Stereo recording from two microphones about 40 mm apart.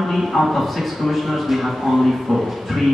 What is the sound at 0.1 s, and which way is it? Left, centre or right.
A man's voice, centre.